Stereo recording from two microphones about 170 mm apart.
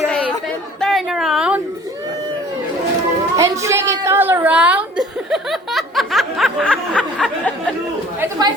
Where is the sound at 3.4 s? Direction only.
15° right (ahead or behind); by 7.5 s 5° left (ahead or behind).